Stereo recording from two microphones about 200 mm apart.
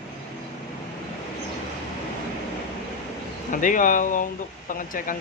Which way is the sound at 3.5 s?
40° left (ahead or behind).